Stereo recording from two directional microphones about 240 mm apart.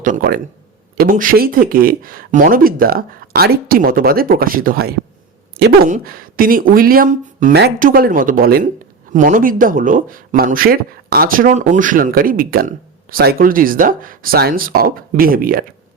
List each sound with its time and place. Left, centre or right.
0.0 s speech: right